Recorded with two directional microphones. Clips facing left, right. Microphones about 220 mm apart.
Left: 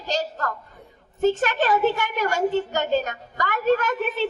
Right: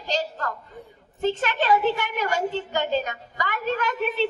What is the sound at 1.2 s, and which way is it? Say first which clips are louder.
A woman's voice: left 4 dB; 45° left (ahead or behind).